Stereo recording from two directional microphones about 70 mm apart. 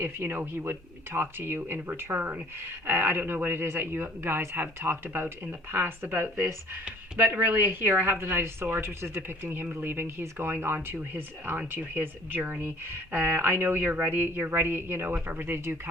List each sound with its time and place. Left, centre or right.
0.0 s a woman's voice: right